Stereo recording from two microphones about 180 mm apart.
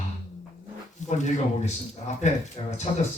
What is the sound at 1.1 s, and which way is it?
Speech, 40° left (ahead or behind).